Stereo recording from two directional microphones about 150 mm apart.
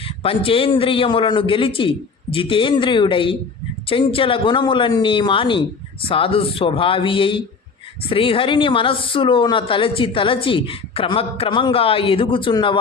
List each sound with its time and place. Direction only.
0.2 s a woman's voice: 40° left (ahead or behind)